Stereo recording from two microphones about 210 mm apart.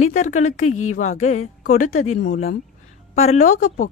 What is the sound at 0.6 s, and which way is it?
Speech, 90° left.